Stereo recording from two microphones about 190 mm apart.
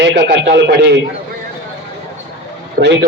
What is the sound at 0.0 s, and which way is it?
A man's voice, 70° right (ahead or behind).